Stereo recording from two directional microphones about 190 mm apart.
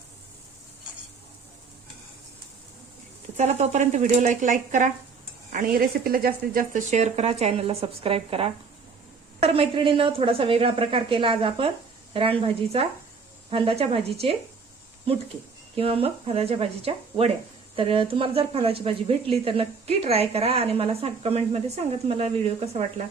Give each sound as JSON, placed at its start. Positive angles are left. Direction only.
{"t": 3.3, "sound": "a woman's voice", "side_deg": -35}
{"t": 12.7, "sound": "a woman's voice", "side_deg": -30}
{"t": 15.7, "sound": "speech", "side_deg": -30}